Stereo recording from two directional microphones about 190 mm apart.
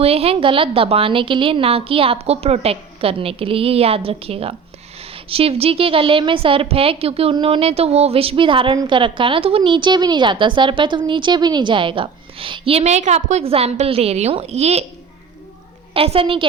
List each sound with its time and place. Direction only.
0.0 s a woman's voice: 30° right (ahead or behind)
16.0 s a woman's voice: 30° right (ahead or behind)